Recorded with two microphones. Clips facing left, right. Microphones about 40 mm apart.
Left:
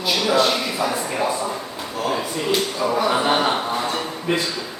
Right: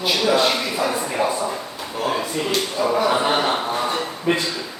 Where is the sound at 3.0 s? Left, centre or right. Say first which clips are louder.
Left 2 dB; centre.